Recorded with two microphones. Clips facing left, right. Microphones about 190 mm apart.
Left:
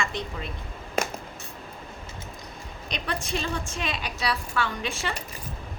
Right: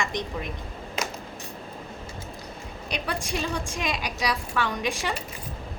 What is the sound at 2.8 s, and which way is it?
A woman's voice, 10° right (ahead or behind).